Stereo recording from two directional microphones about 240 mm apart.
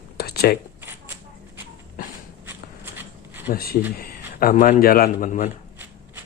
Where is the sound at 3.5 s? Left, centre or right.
Left.